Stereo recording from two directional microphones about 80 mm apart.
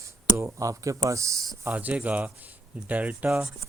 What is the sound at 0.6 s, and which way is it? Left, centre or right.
Speech, right.